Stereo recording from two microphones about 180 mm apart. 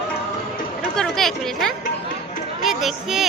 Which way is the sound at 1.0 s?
Centre (ahead or behind).